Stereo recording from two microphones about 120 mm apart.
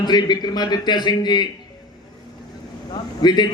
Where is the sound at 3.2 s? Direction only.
35° left (ahead or behind).